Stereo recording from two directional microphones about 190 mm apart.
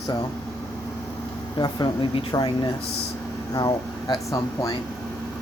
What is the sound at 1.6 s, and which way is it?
Speech, 25° left (ahead or behind).